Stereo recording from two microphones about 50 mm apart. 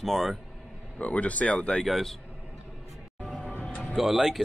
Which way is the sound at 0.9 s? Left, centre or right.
Left.